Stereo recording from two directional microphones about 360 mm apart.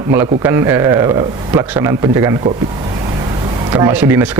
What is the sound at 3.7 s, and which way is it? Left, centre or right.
Speech, centre.